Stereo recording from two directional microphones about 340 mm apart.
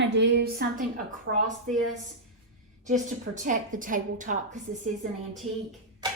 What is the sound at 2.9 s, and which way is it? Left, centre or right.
A woman's voice, right.